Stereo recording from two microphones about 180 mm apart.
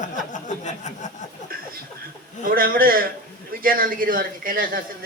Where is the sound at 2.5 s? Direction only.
55° right (ahead or behind).